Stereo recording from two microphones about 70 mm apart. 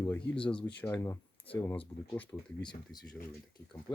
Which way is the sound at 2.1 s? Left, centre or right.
Left.